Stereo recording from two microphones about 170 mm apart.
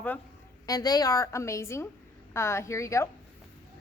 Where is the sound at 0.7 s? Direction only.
25° left (ahead or behind).